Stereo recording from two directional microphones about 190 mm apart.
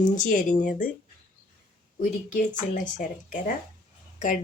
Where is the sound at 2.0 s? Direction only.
40° left (ahead or behind).